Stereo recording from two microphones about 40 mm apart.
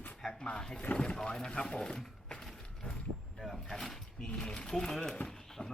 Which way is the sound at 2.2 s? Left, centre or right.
Centre.